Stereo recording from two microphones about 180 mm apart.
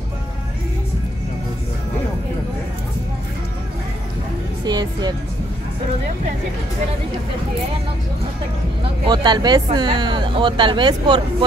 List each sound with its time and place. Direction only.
4.6 s speech: 25° right (ahead or behind)
8.8 s speech: 25° right (ahead or behind)